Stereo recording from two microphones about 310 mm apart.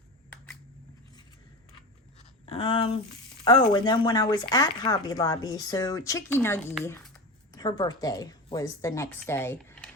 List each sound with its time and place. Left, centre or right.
2.5 s speech: centre